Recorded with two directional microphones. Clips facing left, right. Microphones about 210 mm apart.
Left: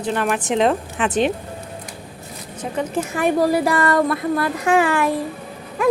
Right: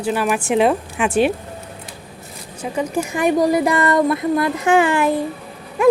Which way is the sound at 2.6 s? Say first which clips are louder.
Right 2 dB; 10° right (ahead or behind).